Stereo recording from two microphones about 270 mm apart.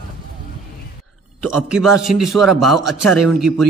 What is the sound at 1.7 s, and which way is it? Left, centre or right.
A man's voice, centre.